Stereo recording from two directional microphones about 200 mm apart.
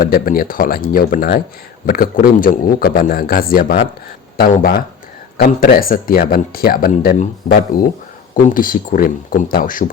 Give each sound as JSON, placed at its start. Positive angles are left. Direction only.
{"t": 0.0, "sound": "speech", "side_deg": 45}